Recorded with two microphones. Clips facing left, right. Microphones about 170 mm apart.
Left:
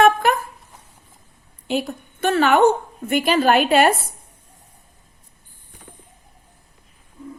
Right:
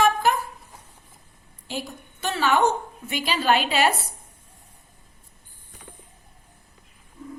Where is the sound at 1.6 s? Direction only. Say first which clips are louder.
Left 9 dB; 60° left (ahead or behind).